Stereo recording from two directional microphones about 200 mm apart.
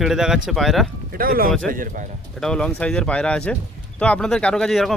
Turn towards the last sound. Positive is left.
turn(degrees=0)  # may be behind; listen again after turning